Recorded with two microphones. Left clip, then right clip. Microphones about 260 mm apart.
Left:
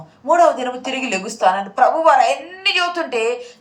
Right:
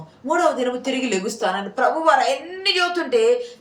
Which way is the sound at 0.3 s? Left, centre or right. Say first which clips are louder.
Left 5 dB; centre.